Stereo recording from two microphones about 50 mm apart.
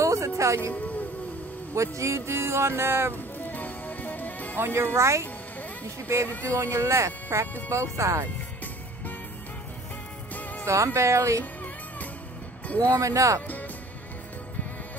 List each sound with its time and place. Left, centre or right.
0.0 s music: right
0.7 s music: left
1.8 s speech: right
3.2 s music: left
4.6 s speech: right
4.9 s speech: right
5.9 s speech: right
6.2 s speech: left
6.5 s speech: right
7.7 s speech: right
10.6 s speech: right
13.0 s speech: right